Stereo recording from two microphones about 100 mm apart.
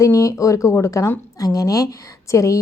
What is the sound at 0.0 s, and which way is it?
A woman's voice, 30° left (ahead or behind).